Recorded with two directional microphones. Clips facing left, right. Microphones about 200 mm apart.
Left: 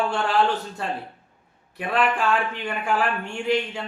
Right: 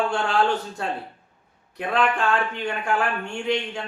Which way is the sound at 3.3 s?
5° left (ahead or behind).